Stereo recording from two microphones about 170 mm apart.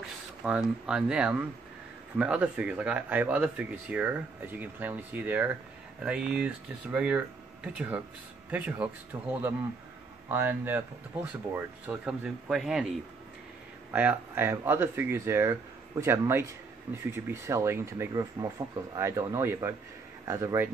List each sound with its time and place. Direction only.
0.0 s speech: 5° right (ahead or behind)
13.9 s speech: 10° right (ahead or behind)